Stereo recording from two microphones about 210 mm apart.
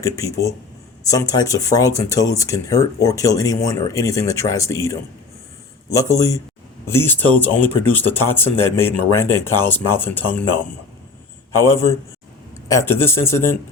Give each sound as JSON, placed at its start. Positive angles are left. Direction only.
{"t": 0.0, "sound": "speech", "side_deg": 15}
{"t": 12.6, "sound": "speech", "side_deg": 15}